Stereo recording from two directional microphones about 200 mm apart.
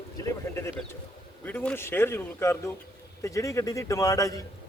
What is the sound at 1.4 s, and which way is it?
A man's voice, 10° left (ahead or behind).